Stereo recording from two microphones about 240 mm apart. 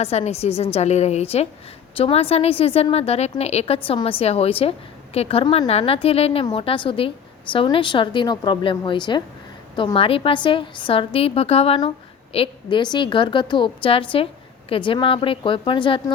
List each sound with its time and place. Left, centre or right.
0.0 s a woman's voice: left